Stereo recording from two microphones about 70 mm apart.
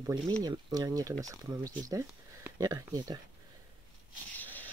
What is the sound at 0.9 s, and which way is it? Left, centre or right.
Speech, right.